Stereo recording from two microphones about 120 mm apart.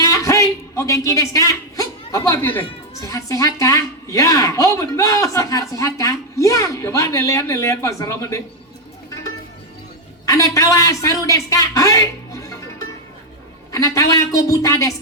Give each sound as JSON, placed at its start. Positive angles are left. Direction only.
{"t": 0.0, "sound": "a man's voice", "side_deg": 25}
{"t": 10.2, "sound": "a man's voice", "side_deg": 25}
{"t": 13.7, "sound": "a woman's voice", "side_deg": 30}